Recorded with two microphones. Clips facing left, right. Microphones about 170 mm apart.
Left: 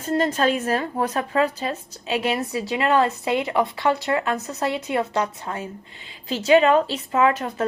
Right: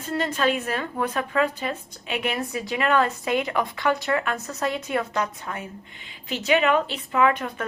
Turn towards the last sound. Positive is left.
turn(degrees=30)  # may be behind; listen again after turning